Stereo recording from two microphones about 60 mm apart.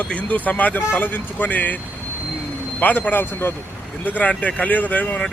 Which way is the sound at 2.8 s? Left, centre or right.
Left.